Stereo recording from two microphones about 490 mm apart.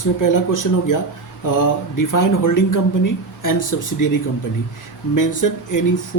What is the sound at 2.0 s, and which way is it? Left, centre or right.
Speech, left.